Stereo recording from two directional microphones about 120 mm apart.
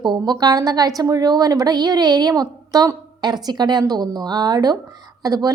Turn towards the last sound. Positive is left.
turn(degrees=-30)  # may be behind; listen again after turning